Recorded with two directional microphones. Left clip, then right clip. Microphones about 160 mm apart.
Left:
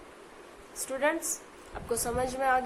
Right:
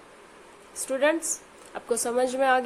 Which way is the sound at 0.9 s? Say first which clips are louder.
Right 5 dB; 50° right (ahead or behind).